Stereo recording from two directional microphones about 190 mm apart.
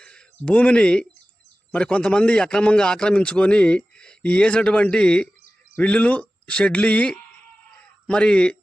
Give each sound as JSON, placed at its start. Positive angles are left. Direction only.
{"t": 0.0, "sound": "a man's voice", "side_deg": 5}